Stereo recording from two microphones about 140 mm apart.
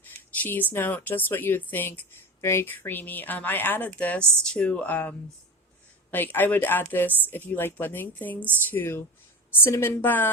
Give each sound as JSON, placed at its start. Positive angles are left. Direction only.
{"t": 0.0, "sound": "speech", "side_deg": 15}